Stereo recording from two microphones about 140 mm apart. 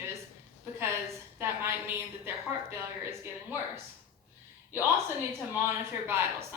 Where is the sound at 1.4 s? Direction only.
15° right (ahead or behind).